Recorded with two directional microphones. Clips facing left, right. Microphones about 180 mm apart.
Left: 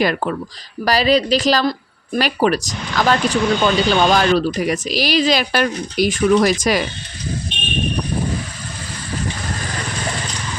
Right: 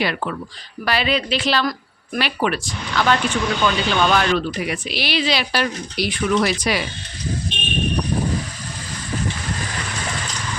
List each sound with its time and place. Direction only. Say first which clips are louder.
0.0 s speech: left 5 dB; 45° left (ahead or behind)